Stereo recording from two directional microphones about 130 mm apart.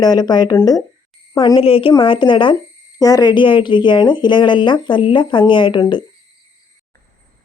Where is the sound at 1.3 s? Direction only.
45° left (ahead or behind).